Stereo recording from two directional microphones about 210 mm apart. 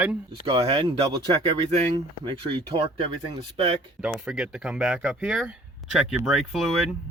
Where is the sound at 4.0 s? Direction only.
5° right (ahead or behind).